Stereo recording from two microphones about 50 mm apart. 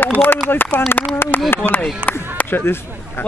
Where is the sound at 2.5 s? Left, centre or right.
Left.